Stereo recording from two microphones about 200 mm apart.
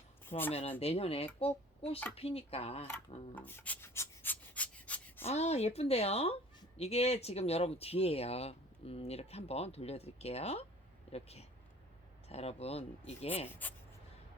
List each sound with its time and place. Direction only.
0.3 s speech: 10° left (ahead or behind)
0.5 s speech: 30° left (ahead or behind)
3.3 s rub: 10° left (ahead or behind)
5.2 s a woman's voice: 35° left (ahead or behind)